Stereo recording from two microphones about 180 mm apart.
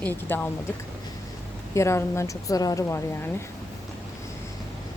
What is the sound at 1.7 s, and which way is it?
Speech, 15° left (ahead or behind).